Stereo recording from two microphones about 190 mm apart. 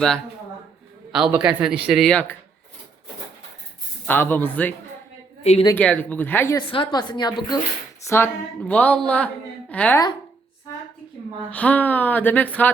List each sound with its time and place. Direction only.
1.1 s speech: 5° right (ahead or behind)
4.0 s speech: 10° left (ahead or behind)
5.4 s a woman's voice: 30° left (ahead or behind)
5.6 s speech: 10° left (ahead or behind)
6.6 s a woman's voice: 25° left (ahead or behind); by 10.0 s 10° left (ahead or behind)
11.5 s speech: 10° left (ahead or behind)